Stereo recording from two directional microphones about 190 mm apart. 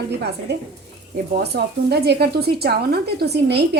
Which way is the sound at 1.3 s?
60° right (ahead or behind).